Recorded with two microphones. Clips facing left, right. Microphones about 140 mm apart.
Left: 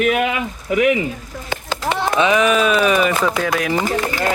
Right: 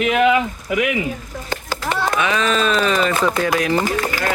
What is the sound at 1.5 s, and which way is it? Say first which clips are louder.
Speech: left 2 dB; 15° left (ahead or behind).